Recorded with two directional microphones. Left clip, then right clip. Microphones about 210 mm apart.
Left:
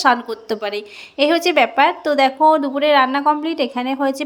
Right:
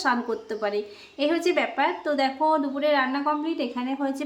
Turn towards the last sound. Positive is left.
turn(degrees=40)  # may be behind; listen again after turning